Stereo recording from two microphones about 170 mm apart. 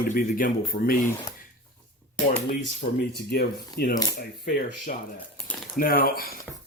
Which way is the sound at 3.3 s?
65° left (ahead or behind).